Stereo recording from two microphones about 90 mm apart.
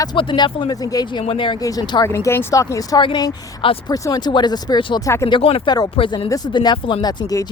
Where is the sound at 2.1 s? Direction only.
30° left (ahead or behind).